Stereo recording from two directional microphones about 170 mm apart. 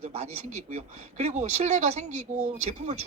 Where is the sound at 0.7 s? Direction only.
40° right (ahead or behind).